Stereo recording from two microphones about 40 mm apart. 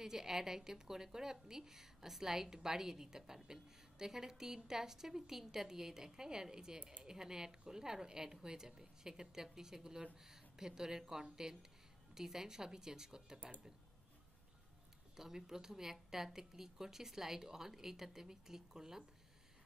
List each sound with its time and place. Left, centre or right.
0.0 s speech: centre
15.1 s speech: centre